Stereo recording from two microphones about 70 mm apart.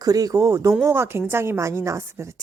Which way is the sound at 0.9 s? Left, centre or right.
Right.